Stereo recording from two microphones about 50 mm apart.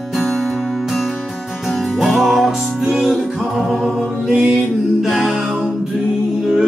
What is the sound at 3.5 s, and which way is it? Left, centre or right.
Mantra, centre.